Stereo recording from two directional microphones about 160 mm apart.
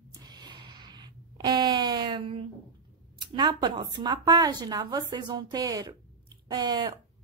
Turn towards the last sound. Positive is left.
turn(degrees=-25)  # may be behind; listen again after turning